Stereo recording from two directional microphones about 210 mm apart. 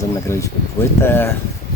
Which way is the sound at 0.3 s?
15° left (ahead or behind).